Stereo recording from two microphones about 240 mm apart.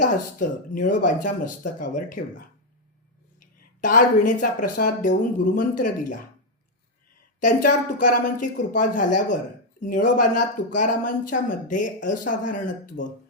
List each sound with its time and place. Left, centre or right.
0.0 s speech: left
3.8 s speech: left
7.3 s speech: left